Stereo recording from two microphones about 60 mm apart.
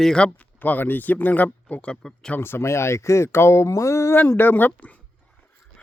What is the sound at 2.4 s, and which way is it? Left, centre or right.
Speech, left.